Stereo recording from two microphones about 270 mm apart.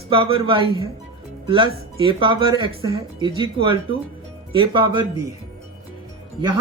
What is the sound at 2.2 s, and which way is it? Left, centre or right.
Speech, centre.